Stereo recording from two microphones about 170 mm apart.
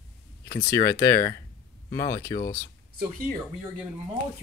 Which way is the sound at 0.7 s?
15° left (ahead or behind).